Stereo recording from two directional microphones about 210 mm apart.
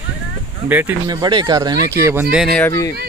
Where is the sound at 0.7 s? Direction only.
10° right (ahead or behind).